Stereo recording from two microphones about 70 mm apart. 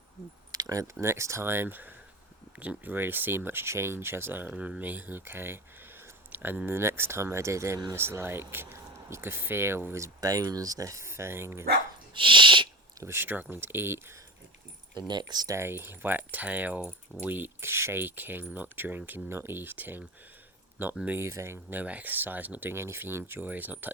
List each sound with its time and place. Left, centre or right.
1.0 s speech: right
10.2 s speech: right
13.0 s speech: right
14.9 s speech: right
15.5 s speech: right
21.2 s speech: right
22.7 s speech: right